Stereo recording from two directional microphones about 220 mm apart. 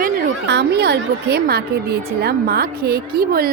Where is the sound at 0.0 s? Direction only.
50° right (ahead or behind).